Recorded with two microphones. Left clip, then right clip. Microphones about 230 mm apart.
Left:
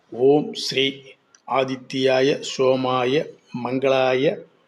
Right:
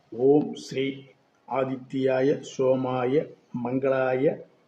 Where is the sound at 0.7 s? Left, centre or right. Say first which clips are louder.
Left 8 dB; centre.